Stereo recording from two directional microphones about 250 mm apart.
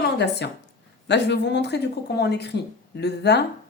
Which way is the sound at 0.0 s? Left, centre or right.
Left.